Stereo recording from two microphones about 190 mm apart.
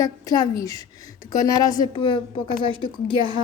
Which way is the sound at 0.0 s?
20° left (ahead or behind).